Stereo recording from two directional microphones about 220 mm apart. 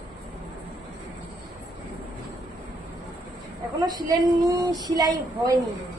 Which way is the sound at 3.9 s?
20° right (ahead or behind).